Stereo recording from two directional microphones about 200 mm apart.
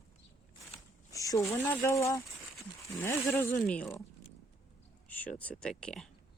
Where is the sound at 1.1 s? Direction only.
15° left (ahead or behind).